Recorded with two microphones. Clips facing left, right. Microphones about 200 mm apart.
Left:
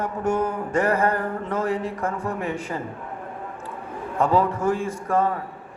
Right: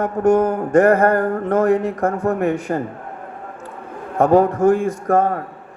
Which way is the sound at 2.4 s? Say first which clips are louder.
Right 8 dB; 60° right (ahead or behind).